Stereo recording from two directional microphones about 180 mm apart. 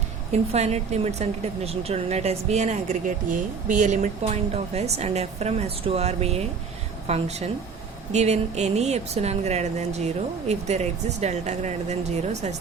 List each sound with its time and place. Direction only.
0.3 s a woman's voice: 35° right (ahead or behind)